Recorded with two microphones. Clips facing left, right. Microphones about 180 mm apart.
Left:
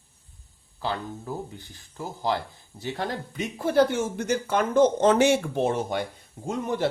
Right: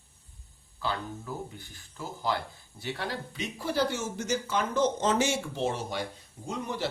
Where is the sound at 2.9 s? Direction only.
50° left (ahead or behind).